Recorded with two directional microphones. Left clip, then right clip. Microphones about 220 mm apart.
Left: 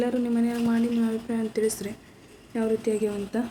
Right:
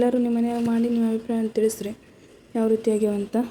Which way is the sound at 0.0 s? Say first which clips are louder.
Right 4 dB; 20° right (ahead or behind).